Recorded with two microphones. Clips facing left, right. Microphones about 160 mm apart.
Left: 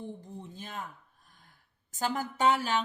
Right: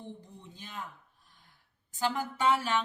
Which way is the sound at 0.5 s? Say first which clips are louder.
Left 5 dB; 50° left (ahead or behind).